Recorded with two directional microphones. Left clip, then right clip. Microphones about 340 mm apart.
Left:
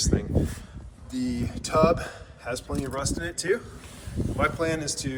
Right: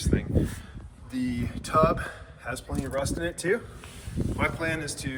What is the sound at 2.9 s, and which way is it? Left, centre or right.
Speech, centre.